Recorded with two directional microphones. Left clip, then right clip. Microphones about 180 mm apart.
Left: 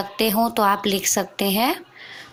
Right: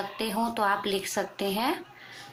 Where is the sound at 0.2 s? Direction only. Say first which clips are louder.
Left 9 dB; 55° left (ahead or behind).